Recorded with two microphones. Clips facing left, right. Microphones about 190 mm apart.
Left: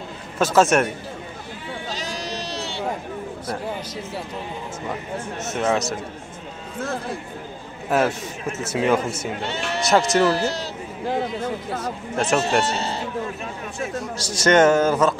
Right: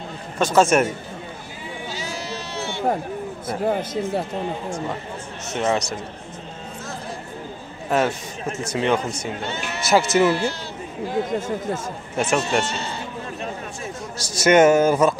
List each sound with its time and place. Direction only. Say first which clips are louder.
0.4 s speech: even; centre (ahead or behind)
2.3 s sheep: even; 35° left (ahead or behind)
3.6 s speech: right 7 dB; 55° right (ahead or behind)
5.5 s speech: even; centre (ahead or behind)
7.9 s speech: left 1 dB; 5° left (ahead or behind)
10.3 s speech: even; 40° left (ahead or behind)
11.2 s speech: right 2 dB; 45° right (ahead or behind)
12.2 s speech: left 1 dB; centre (ahead or behind)
12.6 s speech: left 4 dB; 35° left (ahead or behind)
14.4 s a man's voice: right 2 dB; 10° right (ahead or behind)